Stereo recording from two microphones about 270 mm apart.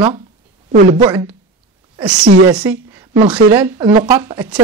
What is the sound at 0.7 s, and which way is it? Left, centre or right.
Speech, centre.